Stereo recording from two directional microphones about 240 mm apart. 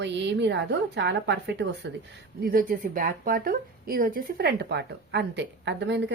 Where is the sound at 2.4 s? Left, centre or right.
Right.